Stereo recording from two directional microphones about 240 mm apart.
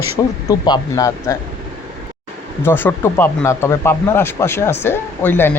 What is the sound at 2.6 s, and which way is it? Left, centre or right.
Speech, centre.